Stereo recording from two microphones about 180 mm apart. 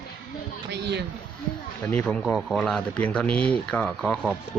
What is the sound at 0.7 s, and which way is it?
Speech, 70° right (ahead or behind).